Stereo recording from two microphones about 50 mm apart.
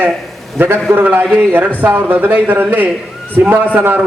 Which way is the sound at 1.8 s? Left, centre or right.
Right.